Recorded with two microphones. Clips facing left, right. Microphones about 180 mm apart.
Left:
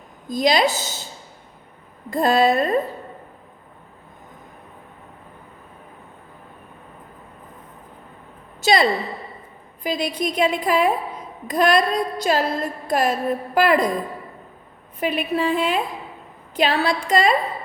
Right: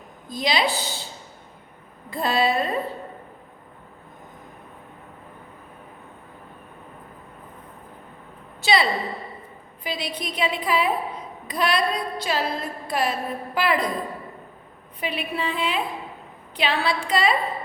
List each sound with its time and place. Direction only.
0.3 s a woman's voice: 45° left (ahead or behind)
2.0 s a woman's voice: 45° left (ahead or behind)
8.6 s a woman's voice: 45° left (ahead or behind)
15.0 s a woman's voice: 45° left (ahead or behind)